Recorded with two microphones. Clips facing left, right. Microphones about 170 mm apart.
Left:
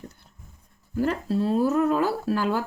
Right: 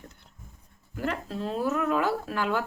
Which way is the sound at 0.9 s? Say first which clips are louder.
Left 7 dB; 35° left (ahead or behind).